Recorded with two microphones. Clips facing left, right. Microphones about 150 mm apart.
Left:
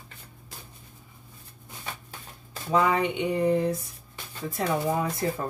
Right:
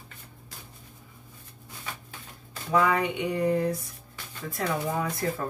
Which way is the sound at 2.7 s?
25° left (ahead or behind).